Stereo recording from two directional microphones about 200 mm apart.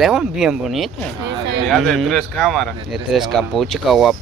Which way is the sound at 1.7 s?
Centre (ahead or behind).